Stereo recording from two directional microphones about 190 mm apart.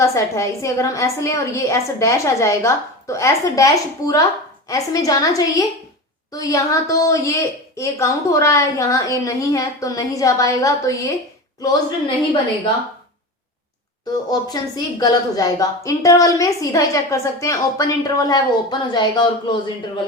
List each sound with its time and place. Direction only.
0.0 s a woman's voice: 15° left (ahead or behind)
14.3 s a woman's voice: 20° left (ahead or behind)